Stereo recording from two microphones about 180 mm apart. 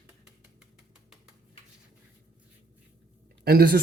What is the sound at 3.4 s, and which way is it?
Speech, 55° right (ahead or behind).